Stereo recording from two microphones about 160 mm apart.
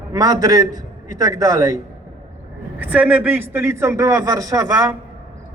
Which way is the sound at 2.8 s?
10° right (ahead or behind).